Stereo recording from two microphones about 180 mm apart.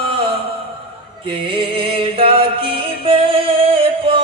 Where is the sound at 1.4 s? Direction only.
30° right (ahead or behind).